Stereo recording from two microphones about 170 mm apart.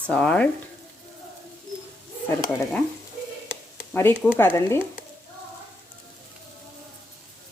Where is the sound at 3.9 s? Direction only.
10° left (ahead or behind).